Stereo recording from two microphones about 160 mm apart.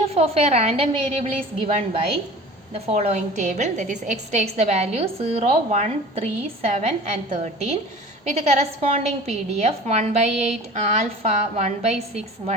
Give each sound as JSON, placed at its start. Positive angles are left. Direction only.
{"t": 0.1, "sound": "a woman's voice", "side_deg": -40}